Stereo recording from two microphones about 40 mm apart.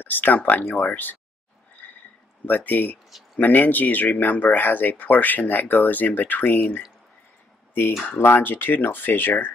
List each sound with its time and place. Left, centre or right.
0.0 s speech: left
1.8 s a sound: left
2.4 s speech: left
8.2 s speech: left